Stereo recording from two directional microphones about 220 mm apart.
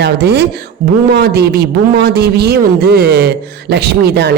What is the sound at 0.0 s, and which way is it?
Speech, 50° right (ahead or behind).